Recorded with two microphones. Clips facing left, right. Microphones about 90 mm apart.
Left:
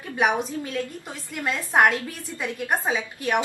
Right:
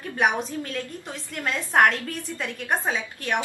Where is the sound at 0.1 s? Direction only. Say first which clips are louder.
Left 1 dB; 5° left (ahead or behind).